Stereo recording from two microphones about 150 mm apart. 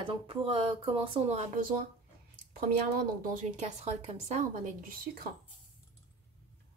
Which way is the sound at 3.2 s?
55° right (ahead or behind).